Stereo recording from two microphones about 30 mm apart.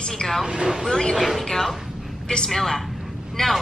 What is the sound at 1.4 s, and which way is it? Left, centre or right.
A woman's voice, centre.